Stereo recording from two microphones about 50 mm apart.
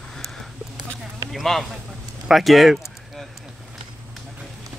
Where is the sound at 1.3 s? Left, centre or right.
Centre.